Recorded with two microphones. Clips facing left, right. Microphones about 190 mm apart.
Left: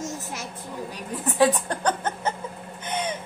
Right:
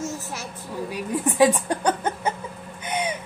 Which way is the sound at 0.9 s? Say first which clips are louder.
Right 3 dB; 10° right (ahead or behind).